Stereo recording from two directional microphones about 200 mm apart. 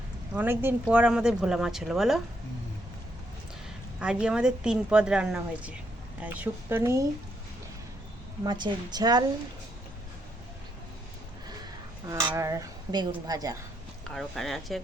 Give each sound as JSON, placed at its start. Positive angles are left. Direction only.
{"t": 0.3, "sound": "speech", "side_deg": -10}
{"t": 4.0, "sound": "speech", "side_deg": -5}
{"t": 8.4, "sound": "a woman's voice", "side_deg": -20}
{"t": 12.0, "sound": "speech", "side_deg": -15}
{"t": 14.1, "sound": "speech", "side_deg": 0}